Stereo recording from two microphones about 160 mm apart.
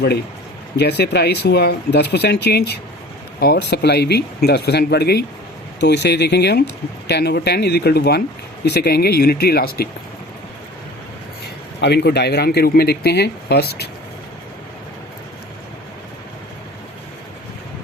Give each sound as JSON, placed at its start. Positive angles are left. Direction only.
{"t": 0.8, "sound": "speech", "side_deg": 90}
{"t": 11.8, "sound": "speech", "side_deg": 90}